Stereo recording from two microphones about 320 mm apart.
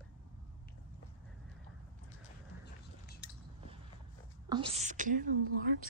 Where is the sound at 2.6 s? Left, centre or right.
Left.